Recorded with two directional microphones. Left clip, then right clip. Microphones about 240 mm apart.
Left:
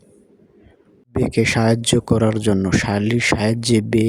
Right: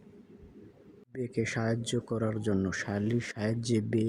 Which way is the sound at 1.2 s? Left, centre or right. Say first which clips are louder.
Left 15 dB; left.